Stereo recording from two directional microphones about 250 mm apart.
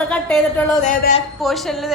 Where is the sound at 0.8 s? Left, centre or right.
Left.